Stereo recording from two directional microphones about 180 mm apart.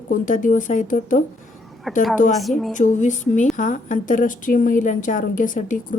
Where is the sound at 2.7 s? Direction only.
40° left (ahead or behind).